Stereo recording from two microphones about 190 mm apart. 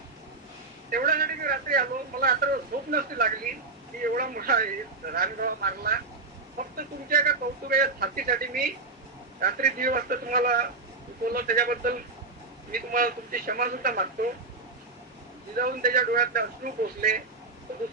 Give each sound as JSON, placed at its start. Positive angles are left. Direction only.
{"t": 0.9, "sound": "a man's voice", "side_deg": -50}
{"t": 15.5, "sound": "a man's voice", "side_deg": -50}